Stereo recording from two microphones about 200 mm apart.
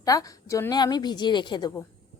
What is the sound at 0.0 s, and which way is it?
A woman's voice, 15° left (ahead or behind).